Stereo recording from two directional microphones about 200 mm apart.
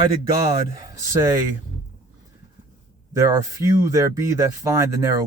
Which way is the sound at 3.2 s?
15° right (ahead or behind).